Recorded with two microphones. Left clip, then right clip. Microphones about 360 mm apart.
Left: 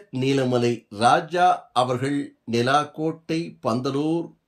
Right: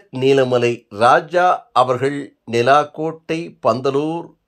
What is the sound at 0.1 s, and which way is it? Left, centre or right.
Speech, centre.